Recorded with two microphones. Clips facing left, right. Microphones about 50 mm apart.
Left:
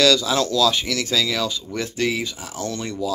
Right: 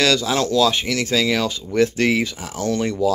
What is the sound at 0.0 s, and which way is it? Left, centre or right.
Speech, right.